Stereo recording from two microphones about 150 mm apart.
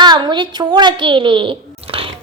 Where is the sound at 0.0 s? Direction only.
30° right (ahead or behind).